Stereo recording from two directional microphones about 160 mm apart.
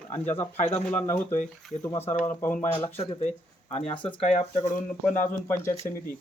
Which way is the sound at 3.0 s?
40° left (ahead or behind).